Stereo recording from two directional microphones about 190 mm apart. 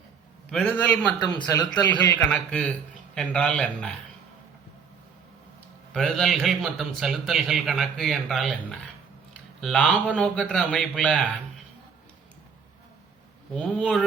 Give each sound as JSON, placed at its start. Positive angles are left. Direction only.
{"t": 0.5, "sound": "speech", "side_deg": 5}
{"t": 1.2, "sound": "speech", "side_deg": 20}
{"t": 1.5, "sound": "speech", "side_deg": 10}
{"t": 5.9, "sound": "speech", "side_deg": 0}
{"t": 13.5, "sound": "speech", "side_deg": 5}